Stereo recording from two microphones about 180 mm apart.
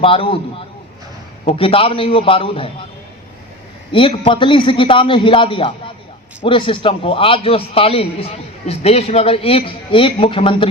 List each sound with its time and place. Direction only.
0.0 s a man's voice: 30° left (ahead or behind)
1.5 s a man's voice: 30° left (ahead or behind)
3.9 s a man's voice: 30° left (ahead or behind)